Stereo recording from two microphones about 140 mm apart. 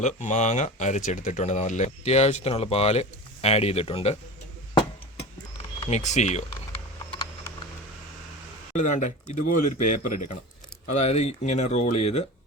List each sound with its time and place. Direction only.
0.0 s speech: 60° left (ahead or behind)
5.9 s speech: 55° left (ahead or behind)
8.7 s speech: 60° left (ahead or behind)
10.9 s speech: 50° left (ahead or behind)